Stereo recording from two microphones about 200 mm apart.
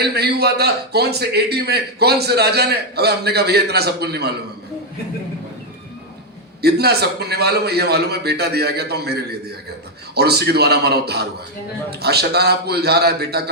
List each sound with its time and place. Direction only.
0.0 s a man's voice: 55° right (ahead or behind)
6.6 s a man's voice: 55° right (ahead or behind)